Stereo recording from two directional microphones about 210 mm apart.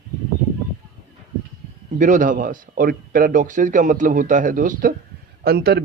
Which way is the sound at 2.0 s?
35° right (ahead or behind).